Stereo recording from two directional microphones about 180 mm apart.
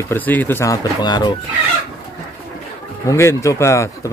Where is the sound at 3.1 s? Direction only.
15° left (ahead or behind).